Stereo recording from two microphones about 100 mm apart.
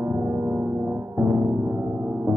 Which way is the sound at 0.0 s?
20° right (ahead or behind).